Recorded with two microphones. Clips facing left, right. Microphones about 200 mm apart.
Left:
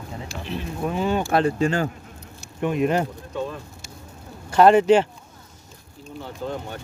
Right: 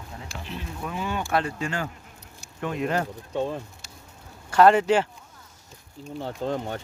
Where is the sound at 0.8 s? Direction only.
30° left (ahead or behind).